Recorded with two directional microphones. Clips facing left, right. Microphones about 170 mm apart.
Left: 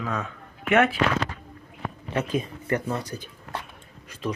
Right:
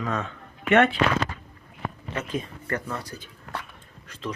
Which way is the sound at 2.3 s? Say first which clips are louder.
Left 2 dB; 20° left (ahead or behind).